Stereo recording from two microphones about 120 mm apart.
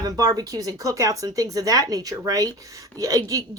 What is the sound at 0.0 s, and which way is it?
A woman's voice, 30° right (ahead or behind).